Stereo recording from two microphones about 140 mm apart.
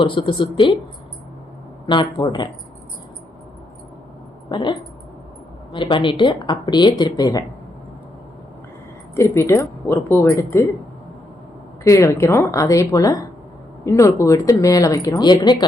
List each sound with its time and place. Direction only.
0.0 s speech: 35° left (ahead or behind)
1.9 s speech: 35° left (ahead or behind)
4.4 s speech: 30° left (ahead or behind)
9.1 s speech: 20° left (ahead or behind)
11.8 s speech: 20° left (ahead or behind)